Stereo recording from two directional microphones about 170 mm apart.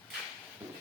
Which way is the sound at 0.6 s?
10° right (ahead or behind).